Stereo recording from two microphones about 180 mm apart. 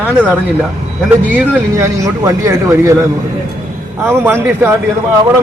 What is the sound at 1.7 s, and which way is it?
Speech, 15° right (ahead or behind).